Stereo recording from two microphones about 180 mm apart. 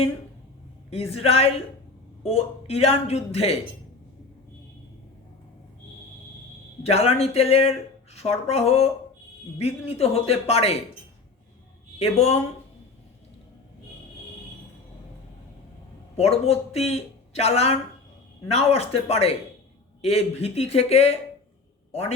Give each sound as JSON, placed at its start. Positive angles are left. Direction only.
{"t": 0.9, "sound": "speech", "side_deg": 35}
{"t": 6.8, "sound": "speech", "side_deg": 35}
{"t": 12.0, "sound": "speech", "side_deg": 35}
{"t": 16.1, "sound": "speech", "side_deg": 35}